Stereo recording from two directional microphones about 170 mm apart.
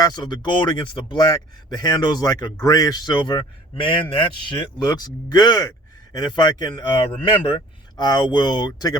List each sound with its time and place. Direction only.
0.0 s speech: 25° left (ahead or behind)